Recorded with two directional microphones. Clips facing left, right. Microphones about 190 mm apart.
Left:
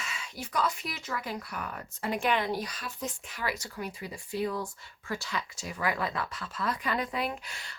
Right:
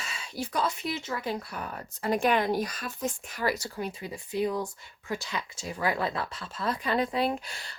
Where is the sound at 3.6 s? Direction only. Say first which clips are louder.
Right 3 dB; 25° right (ahead or behind).